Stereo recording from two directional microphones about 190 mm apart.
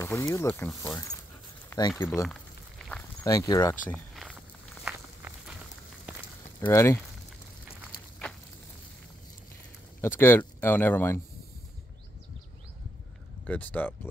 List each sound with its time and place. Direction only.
0.0 s speech: 15° left (ahead or behind)
3.3 s speech: 20° left (ahead or behind)
3.9 s walk: centre (ahead or behind)
6.7 s speech: 15° left (ahead or behind)
10.0 s speech: 10° left (ahead or behind)
13.5 s speech: 10° left (ahead or behind)